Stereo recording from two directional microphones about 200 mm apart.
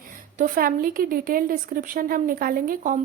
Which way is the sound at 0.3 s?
45° right (ahead or behind).